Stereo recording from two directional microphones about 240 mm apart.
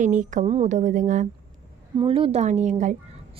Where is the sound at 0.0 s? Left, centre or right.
Right.